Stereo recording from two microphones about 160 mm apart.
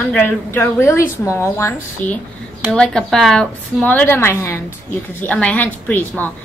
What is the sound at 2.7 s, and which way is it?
A woman's voice, 5° left (ahead or behind).